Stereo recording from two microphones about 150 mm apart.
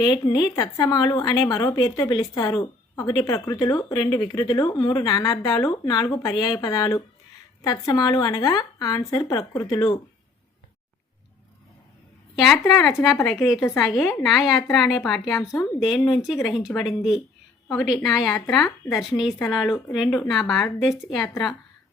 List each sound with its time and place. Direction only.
0.0 s a woman's voice: 30° left (ahead or behind)
12.4 s speech: centre (ahead or behind)
15.4 s speech: 15° left (ahead or behind)
16.0 s speech: centre (ahead or behind)